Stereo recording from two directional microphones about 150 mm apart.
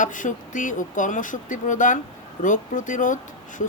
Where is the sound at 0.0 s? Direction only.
60° left (ahead or behind).